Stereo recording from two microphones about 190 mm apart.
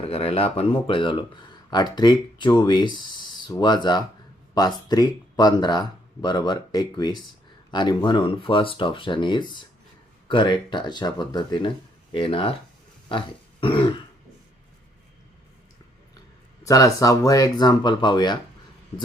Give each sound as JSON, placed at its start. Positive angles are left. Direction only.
{"t": 0.1, "sound": "speech", "side_deg": 30}
{"t": 16.6, "sound": "speech", "side_deg": 15}